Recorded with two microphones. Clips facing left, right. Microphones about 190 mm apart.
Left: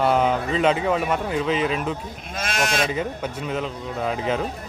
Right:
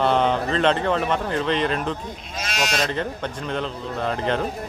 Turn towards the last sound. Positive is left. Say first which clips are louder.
# even
turn(degrees=5)  # may be behind; listen again after turning